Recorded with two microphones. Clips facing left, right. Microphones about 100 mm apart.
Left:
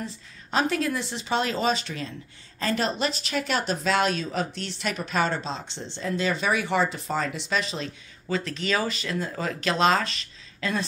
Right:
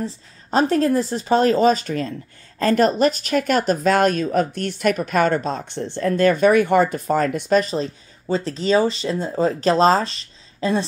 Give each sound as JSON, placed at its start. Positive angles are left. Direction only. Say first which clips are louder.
{"t": 0.0, "sound": "speech", "louder": "right 7 dB", "side_deg": -35}